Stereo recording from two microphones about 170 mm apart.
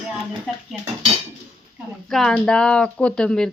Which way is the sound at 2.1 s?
5° left (ahead or behind).